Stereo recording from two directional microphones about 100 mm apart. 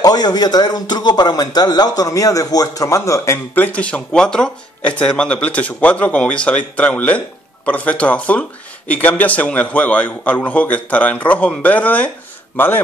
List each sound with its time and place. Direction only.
0.0 s a man's voice: 40° left (ahead or behind)
3.5 s a man's voice: 15° left (ahead or behind)